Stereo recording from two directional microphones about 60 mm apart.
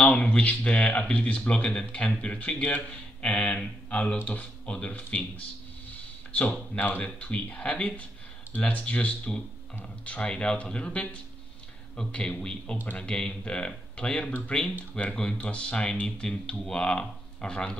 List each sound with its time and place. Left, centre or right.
0.0 s speech: left
7.0 s speech: left